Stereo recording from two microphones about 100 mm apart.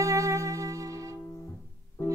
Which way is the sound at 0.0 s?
30° right (ahead or behind).